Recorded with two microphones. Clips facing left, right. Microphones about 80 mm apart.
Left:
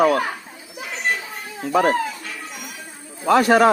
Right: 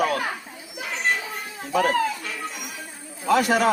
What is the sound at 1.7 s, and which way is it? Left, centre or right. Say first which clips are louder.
Speech: left 4 dB; left.